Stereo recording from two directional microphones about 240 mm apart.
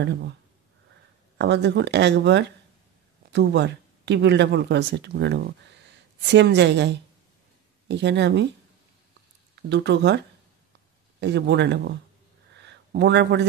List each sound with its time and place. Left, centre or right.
1.4 s speech: right
9.6 s speech: right
12.5 s a sound: right